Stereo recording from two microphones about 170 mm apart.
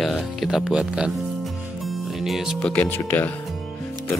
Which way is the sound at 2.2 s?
Centre (ahead or behind).